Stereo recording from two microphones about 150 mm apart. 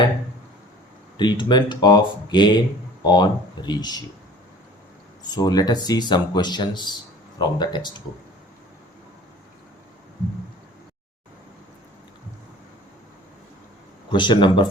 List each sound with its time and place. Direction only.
1.1 s speech: 30° left (ahead or behind)
5.3 s speech: 25° left (ahead or behind)
14.1 s speech: 30° left (ahead or behind)